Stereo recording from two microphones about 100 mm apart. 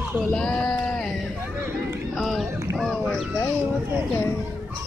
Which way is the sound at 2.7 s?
Centre (ahead or behind).